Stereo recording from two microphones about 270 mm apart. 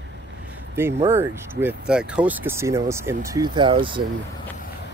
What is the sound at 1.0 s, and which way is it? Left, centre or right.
Speech, centre.